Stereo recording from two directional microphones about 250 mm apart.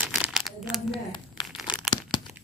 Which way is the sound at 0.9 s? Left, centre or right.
Centre.